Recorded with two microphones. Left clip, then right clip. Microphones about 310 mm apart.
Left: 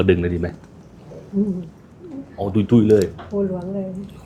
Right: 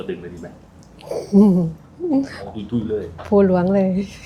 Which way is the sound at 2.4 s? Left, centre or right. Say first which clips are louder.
Left 8 dB; left.